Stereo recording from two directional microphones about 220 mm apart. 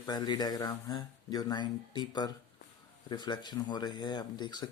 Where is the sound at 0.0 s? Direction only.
20° left (ahead or behind).